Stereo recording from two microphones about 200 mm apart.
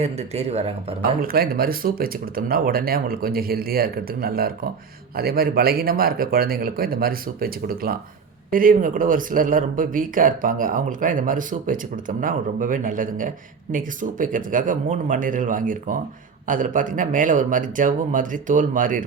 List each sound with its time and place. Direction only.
0.0 s speech: 35° right (ahead or behind)
1.2 s speech: 50° right (ahead or behind)